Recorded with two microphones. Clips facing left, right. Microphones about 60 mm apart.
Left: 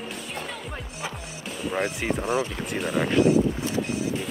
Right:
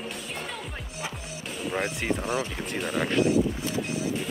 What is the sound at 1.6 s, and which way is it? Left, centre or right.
Speech, centre.